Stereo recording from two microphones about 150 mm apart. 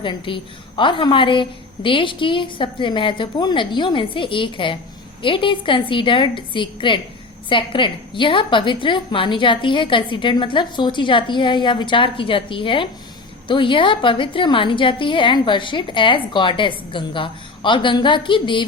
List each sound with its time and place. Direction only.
0.0 s a woman's voice: 35° left (ahead or behind)